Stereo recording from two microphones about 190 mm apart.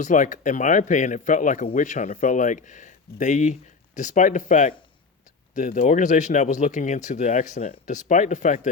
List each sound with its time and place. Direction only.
0.0 s speech: 40° left (ahead or behind)